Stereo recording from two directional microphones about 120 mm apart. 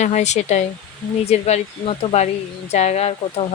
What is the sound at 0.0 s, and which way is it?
Speech, 75° left (ahead or behind).